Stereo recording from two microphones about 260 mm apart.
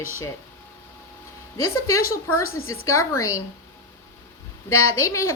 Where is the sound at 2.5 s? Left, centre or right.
Left.